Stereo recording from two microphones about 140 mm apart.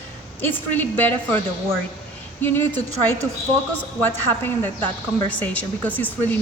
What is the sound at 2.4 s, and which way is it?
Speech, 15° left (ahead or behind).